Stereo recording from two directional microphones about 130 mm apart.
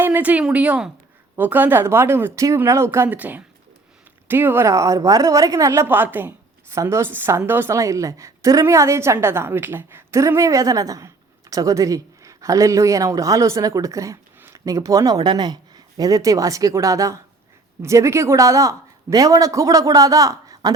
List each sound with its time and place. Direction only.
0.0 s a woman's voice: 15° right (ahead or behind)